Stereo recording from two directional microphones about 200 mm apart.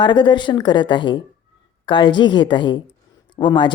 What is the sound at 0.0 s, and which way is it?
A woman's voice, 20° left (ahead or behind).